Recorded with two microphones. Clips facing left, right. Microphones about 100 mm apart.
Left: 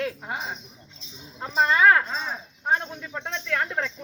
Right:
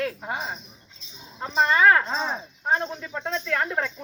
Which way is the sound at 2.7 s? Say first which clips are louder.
Right 3 dB; 10° right (ahead or behind).